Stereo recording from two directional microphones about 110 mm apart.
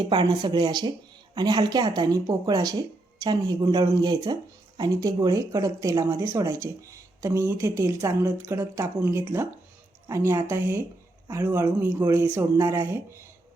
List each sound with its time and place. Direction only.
0.1 s speech: 45° right (ahead or behind); by 13.2 s 25° right (ahead or behind)